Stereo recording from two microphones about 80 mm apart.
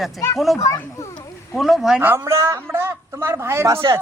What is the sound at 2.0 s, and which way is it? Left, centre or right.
A man's voice, right.